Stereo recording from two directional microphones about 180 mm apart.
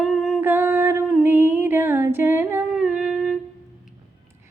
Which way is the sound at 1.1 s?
10° right (ahead or behind).